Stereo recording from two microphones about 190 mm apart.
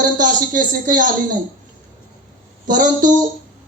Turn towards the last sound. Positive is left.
turn(degrees=-45)  # may be behind; listen again after turning